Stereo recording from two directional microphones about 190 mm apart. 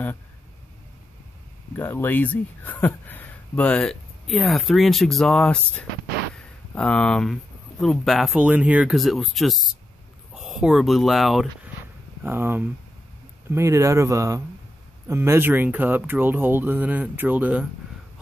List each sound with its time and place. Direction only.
1.8 s speech: 10° left (ahead or behind)
6.3 s a sound: 5° left (ahead or behind)
7.8 s speech: centre (ahead or behind)
12.2 s speech: 10° right (ahead or behind)